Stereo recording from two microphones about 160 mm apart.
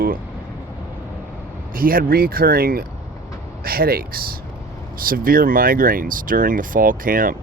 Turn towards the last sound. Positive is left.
turn(degrees=-60)  # may be behind; listen again after turning